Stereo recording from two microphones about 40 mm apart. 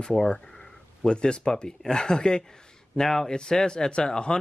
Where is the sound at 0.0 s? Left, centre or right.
Centre.